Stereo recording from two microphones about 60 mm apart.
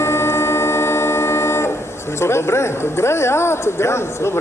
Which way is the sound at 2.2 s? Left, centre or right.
Left.